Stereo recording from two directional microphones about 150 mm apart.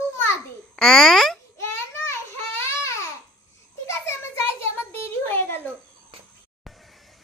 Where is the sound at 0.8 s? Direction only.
5° left (ahead or behind).